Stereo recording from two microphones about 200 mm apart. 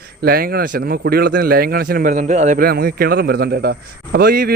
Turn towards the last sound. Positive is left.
turn(degrees=-50)  # may be behind; listen again after turning